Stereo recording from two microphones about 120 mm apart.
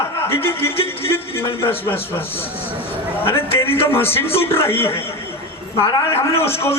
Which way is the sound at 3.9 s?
20° left (ahead or behind).